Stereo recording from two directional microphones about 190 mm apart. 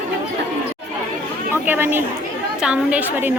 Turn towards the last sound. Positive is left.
turn(degrees=-10)  # may be behind; listen again after turning